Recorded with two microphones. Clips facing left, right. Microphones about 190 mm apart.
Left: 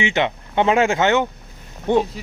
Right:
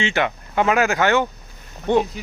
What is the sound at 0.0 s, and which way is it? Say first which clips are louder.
Speech: left 1 dB; 20° left (ahead or behind).